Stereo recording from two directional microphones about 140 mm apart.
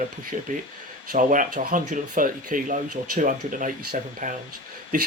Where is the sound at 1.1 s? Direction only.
70° right (ahead or behind).